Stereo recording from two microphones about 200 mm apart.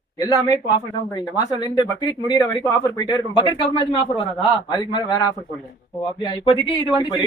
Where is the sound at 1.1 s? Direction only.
20° left (ahead or behind).